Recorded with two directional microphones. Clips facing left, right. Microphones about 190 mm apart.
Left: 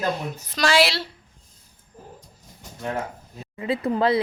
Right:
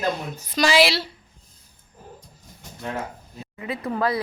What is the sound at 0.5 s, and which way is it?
Speech, centre (ahead or behind).